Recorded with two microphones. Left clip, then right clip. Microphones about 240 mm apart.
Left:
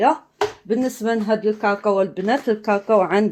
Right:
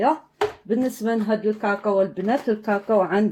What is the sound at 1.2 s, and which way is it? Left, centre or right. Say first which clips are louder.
Speech: left 4 dB; left.